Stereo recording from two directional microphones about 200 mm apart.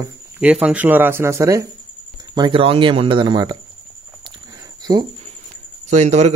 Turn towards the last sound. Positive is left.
turn(degrees=-35)  # may be behind; listen again after turning